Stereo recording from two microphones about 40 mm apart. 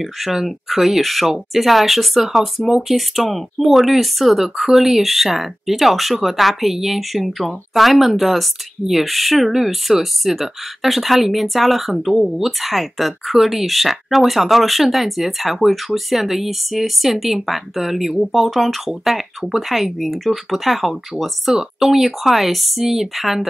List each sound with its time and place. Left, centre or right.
0.0 s speech: centre